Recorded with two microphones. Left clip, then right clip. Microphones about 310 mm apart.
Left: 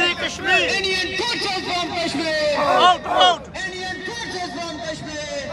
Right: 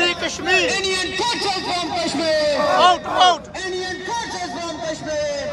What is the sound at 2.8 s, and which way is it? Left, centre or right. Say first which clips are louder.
Speech: right 1 dB; centre.